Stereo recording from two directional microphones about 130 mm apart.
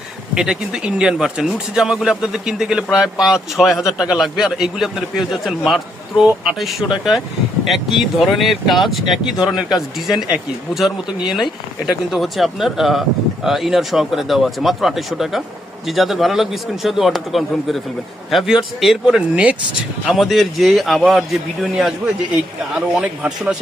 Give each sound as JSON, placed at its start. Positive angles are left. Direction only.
{"t": 0.3, "sound": "speech", "side_deg": -5}